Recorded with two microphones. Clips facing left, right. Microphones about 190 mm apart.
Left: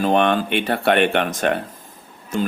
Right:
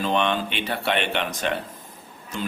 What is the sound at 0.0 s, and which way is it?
Speech, 50° left (ahead or behind).